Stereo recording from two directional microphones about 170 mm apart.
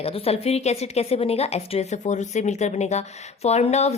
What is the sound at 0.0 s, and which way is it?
Speech, 35° left (ahead or behind).